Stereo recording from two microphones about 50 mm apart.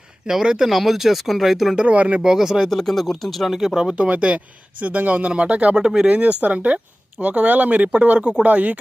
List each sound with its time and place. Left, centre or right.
0.3 s speech: centre
1.9 s speech: right
2.2 s speech: centre
2.6 s speech: centre
3.9 s speech: right
5.7 s speech: centre
6.1 s speech: right